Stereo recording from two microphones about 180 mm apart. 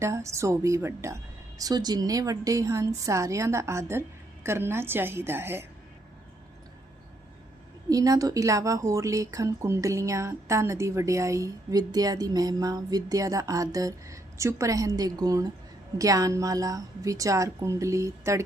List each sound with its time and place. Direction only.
0.0 s a woman's voice: 15° right (ahead or behind)
7.9 s a woman's voice: 20° right (ahead or behind)